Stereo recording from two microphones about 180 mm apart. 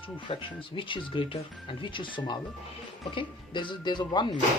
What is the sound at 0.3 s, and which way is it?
Speech, 30° left (ahead or behind).